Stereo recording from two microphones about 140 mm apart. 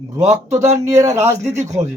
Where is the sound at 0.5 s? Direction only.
60° right (ahead or behind).